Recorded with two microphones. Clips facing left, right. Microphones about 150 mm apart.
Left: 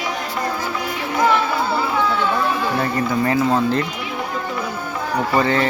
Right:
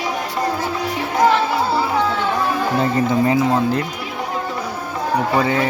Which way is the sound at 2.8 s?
20° right (ahead or behind).